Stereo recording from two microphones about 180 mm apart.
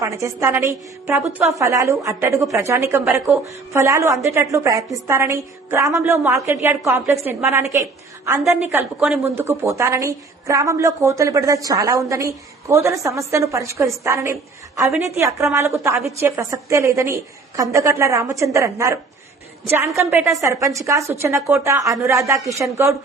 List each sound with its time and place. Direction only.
0.0 s a woman's voice: 15° right (ahead or behind)
20.0 s a woman's voice: 10° right (ahead or behind)